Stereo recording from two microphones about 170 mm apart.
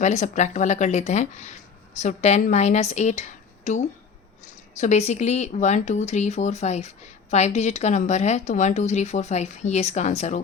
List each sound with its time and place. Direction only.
0.0 s a woman's voice: 45° left (ahead or behind)